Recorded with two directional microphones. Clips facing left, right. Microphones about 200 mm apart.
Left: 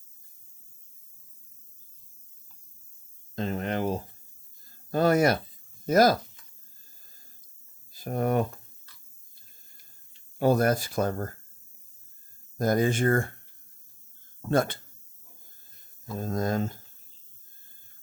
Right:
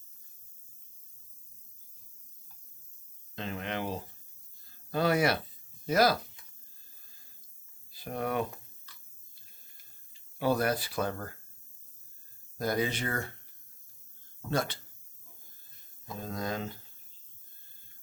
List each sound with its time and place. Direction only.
3.3 s a sound: 40° left (ahead or behind)
5.8 s speech: 45° left (ahead or behind)
7.9 s speech: 45° left (ahead or behind)
10.3 s speech: 45° left (ahead or behind)
12.5 s speech: 45° left (ahead or behind)
14.5 s speech: 50° left (ahead or behind)
16.1 s speech: 45° left (ahead or behind)